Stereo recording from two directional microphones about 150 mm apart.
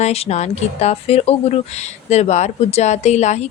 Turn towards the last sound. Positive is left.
turn(degrees=50)  # may be behind; listen again after turning